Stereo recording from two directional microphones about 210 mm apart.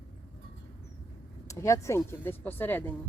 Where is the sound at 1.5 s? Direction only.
15° left (ahead or behind).